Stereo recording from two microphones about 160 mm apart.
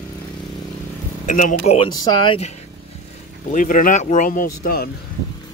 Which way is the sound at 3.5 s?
55° left (ahead or behind).